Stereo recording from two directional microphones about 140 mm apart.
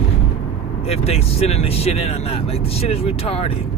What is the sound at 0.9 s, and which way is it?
Speech, 45° left (ahead or behind).